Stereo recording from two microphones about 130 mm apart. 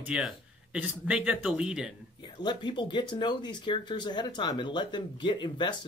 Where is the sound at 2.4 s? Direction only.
35° left (ahead or behind).